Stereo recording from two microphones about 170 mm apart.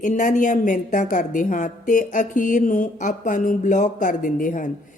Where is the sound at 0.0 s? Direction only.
50° left (ahead or behind).